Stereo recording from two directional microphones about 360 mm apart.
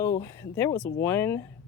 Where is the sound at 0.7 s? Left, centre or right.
Left.